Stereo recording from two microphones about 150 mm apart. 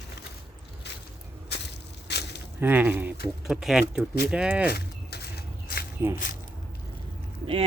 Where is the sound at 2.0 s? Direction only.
90° left.